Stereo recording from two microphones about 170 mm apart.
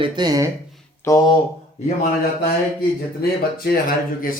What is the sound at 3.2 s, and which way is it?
Speech, 65° left (ahead or behind).